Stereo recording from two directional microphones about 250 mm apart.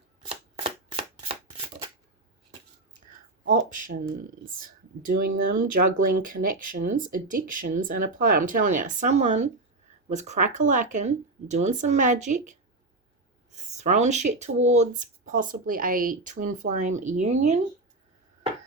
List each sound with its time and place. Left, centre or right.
0.3 s shuffling cards: right
3.5 s speech: right
13.5 s a sound: right
14.3 s speech: right